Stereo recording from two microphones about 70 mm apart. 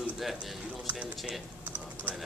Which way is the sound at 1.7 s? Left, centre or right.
Right.